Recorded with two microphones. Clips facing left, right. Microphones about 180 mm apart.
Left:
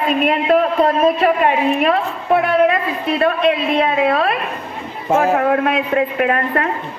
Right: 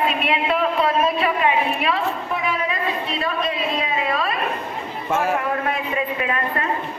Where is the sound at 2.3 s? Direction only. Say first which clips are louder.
Left 10 dB; 65° left (ahead or behind).